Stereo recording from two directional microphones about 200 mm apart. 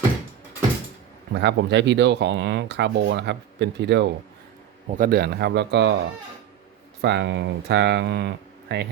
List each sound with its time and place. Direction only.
1.3 s speech: 60° right (ahead or behind)
4.9 s speech: 45° right (ahead or behind)
7.0 s speech: 60° right (ahead or behind)